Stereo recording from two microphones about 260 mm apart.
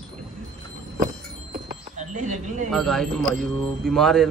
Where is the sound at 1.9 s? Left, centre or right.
Right.